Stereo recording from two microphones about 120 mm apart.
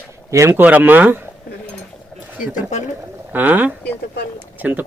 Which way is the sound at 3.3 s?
15° right (ahead or behind).